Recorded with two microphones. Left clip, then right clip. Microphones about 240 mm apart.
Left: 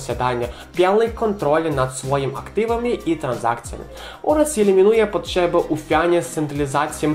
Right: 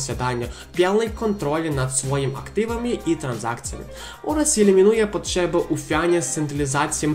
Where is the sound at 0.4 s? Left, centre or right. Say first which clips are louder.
Left 2 dB; right.